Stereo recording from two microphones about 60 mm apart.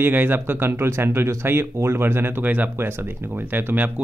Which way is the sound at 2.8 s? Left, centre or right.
Right.